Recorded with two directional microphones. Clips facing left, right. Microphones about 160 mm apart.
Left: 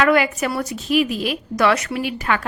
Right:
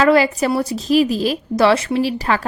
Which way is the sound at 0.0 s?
35° right (ahead or behind).